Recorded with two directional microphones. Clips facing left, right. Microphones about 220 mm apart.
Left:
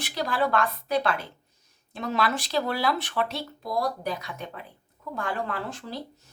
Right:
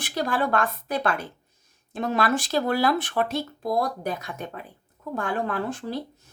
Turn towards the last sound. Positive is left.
turn(degrees=-50)  # may be behind; listen again after turning